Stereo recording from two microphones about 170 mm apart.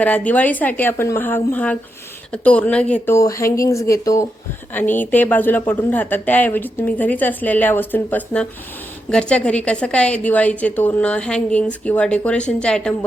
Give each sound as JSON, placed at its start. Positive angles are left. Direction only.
{"t": 0.0, "sound": "a woman's voice", "side_deg": 10}